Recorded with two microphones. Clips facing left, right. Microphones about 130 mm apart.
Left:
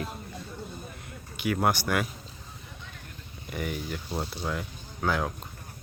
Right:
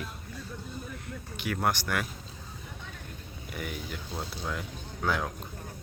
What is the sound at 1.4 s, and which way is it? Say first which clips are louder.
Speech: left 4 dB; 10° left (ahead or behind).